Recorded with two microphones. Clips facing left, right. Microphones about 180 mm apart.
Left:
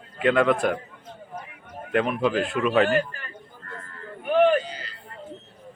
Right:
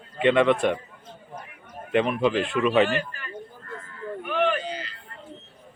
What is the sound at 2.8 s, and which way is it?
Speech, 45° left (ahead or behind).